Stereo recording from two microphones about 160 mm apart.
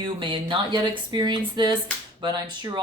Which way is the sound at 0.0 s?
30° right (ahead or behind).